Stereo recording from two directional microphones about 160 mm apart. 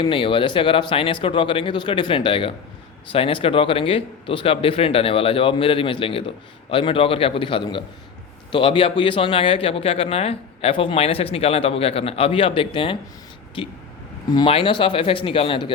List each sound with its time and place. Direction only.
0.0 s speech: 30° left (ahead or behind)